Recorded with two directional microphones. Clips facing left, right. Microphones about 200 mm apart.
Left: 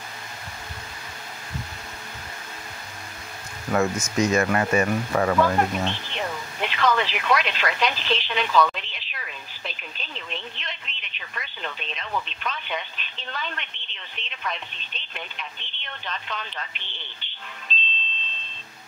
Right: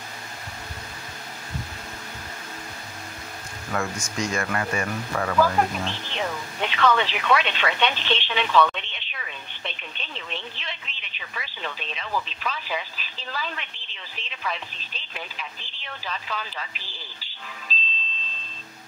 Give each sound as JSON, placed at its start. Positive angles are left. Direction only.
{"t": 3.7, "sound": "speech", "side_deg": 20}
{"t": 5.4, "sound": "speech", "side_deg": 0}